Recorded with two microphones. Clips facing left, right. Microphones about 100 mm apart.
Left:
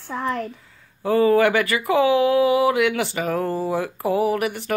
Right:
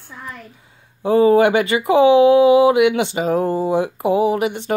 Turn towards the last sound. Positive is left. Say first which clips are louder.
# right 4 dB
turn(degrees=-20)  # may be behind; listen again after turning